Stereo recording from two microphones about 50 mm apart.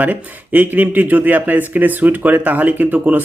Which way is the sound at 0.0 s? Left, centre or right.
Right.